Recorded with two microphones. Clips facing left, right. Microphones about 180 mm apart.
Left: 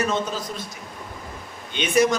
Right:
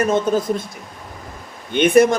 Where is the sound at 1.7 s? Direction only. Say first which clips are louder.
Right 7 dB; 55° right (ahead or behind).